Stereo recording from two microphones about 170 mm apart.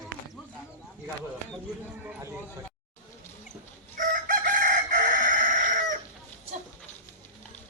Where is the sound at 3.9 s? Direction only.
50° right (ahead or behind).